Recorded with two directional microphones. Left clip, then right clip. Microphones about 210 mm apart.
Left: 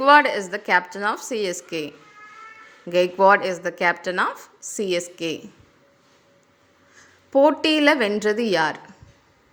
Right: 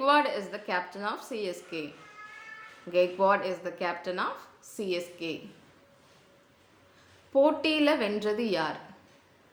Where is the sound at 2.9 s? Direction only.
45° left (ahead or behind).